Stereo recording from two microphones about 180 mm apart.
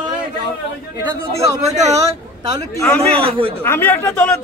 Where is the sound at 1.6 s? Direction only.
40° right (ahead or behind).